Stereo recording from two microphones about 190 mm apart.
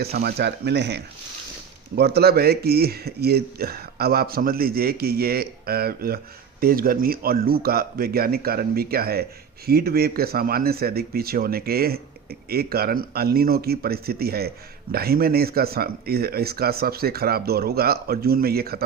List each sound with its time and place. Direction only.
0.0 s speech: 55° right (ahead or behind)